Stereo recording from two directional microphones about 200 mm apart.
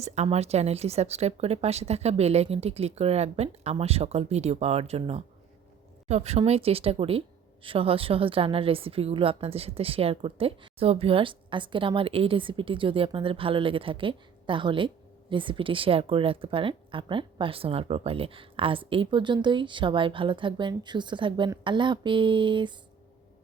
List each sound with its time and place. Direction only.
0.0 s a woman's voice: 35° right (ahead or behind)